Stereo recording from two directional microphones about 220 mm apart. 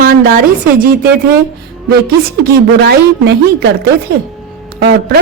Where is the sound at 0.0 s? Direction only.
40° right (ahead or behind).